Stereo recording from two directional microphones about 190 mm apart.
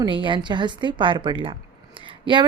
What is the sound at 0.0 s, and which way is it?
A woman's voice, 25° right (ahead or behind).